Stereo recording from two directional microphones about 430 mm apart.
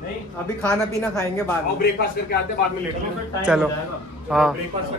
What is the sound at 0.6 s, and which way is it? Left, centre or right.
Speech, centre.